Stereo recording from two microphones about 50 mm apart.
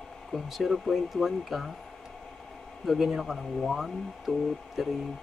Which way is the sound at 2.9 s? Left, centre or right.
Centre.